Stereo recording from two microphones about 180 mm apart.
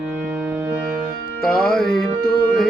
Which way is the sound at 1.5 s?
Centre (ahead or behind).